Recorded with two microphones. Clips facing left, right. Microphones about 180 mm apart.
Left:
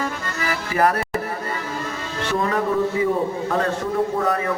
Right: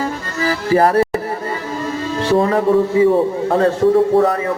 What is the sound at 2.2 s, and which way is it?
Speech, 30° right (ahead or behind).